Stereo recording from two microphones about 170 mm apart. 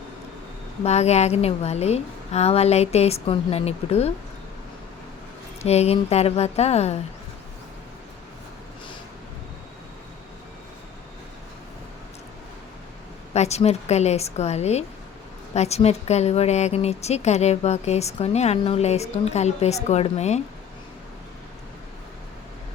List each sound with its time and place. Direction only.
0.9 s speech: 40° left (ahead or behind)
5.6 s speech: 40° left (ahead or behind)
13.3 s speech: 40° left (ahead or behind)